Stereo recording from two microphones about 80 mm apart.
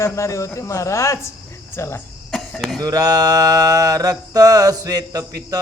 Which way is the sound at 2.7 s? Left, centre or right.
Right.